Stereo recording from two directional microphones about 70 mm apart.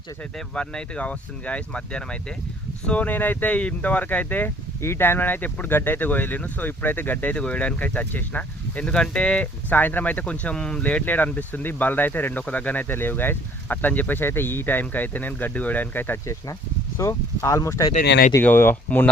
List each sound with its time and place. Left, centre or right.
0.3 s speech: centre
4.8 s speech: left
17.0 s speech: left
18.5 s speech: left